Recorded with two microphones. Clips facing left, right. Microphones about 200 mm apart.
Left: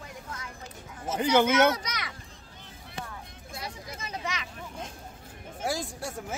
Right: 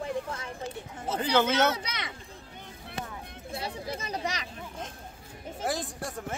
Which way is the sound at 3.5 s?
30° right (ahead or behind).